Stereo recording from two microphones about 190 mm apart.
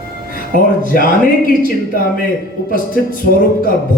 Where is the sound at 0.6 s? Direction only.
45° left (ahead or behind).